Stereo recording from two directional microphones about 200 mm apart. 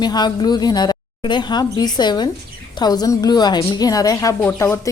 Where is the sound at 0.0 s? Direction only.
20° left (ahead or behind).